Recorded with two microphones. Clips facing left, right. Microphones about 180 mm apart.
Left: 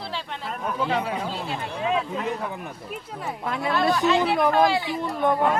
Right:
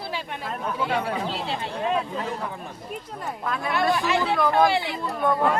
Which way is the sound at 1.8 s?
Centre (ahead or behind).